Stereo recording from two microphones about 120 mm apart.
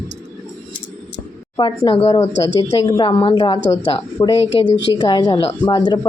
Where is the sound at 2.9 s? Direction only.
45° left (ahead or behind).